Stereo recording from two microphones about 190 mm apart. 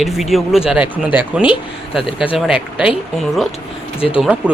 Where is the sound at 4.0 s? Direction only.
30° left (ahead or behind).